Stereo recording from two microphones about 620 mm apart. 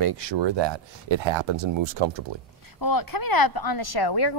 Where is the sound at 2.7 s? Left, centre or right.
Left.